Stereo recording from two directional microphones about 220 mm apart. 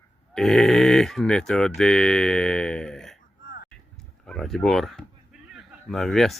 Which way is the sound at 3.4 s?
40° left (ahead or behind).